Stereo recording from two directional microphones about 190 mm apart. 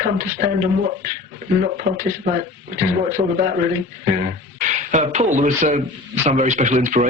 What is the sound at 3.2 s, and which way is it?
Speech, 40° right (ahead or behind).